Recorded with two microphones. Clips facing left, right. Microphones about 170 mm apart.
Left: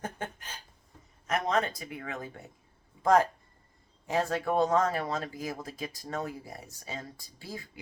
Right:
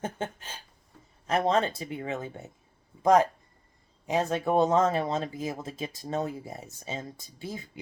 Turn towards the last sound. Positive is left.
turn(degrees=-20)  # may be behind; listen again after turning